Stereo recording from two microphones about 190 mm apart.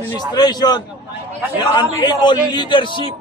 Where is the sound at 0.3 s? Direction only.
20° left (ahead or behind).